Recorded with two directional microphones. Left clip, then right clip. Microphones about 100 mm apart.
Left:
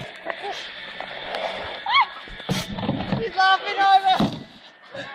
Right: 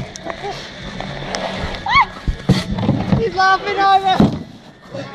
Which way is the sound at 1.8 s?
20° right (ahead or behind).